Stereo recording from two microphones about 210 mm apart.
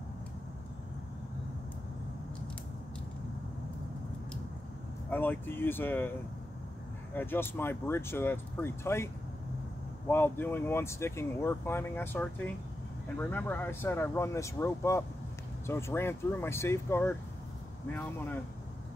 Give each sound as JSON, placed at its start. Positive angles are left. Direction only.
{"t": 5.1, "sound": "speech", "side_deg": 10}
{"t": 7.2, "sound": "speech", "side_deg": 10}